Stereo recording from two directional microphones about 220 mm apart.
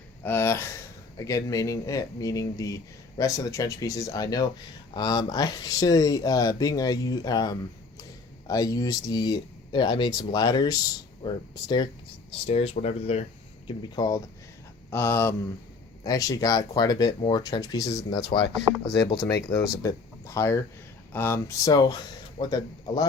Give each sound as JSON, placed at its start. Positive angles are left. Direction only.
{"t": 0.2, "sound": "speech", "side_deg": 10}
{"t": 18.4, "sound": "speech", "side_deg": 50}
{"t": 19.3, "sound": "speech", "side_deg": 15}